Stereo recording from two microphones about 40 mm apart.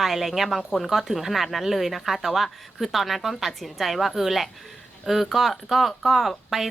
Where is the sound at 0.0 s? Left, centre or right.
Centre.